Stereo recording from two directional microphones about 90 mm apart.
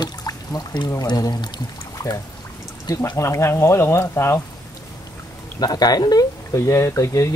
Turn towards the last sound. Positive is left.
turn(degrees=35)  # may be behind; listen again after turning